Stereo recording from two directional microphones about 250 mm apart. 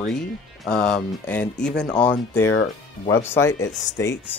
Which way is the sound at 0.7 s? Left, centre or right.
Centre.